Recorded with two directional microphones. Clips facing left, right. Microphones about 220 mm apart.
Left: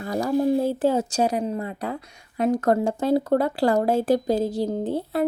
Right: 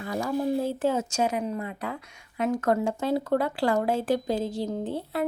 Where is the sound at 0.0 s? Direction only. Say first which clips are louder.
Left 5 dB; 35° left (ahead or behind).